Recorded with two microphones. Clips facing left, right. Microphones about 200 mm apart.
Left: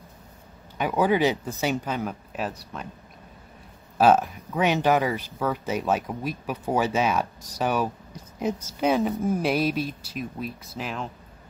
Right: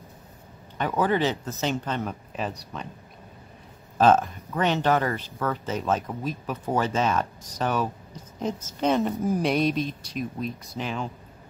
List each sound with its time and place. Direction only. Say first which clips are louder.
0.7 s speech: left 2 dB; 10° left (ahead or behind)
4.0 s speech: even; 10° left (ahead or behind)